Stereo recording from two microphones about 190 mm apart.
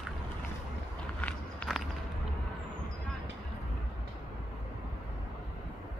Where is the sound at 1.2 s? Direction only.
10° left (ahead or behind).